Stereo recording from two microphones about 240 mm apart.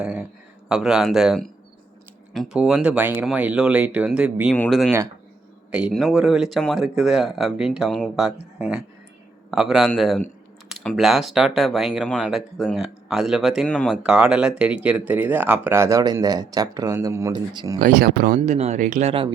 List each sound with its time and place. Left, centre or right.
0.0 s a man's voice: centre
17.7 s speech: right